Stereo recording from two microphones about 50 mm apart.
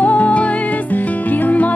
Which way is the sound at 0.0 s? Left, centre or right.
Left.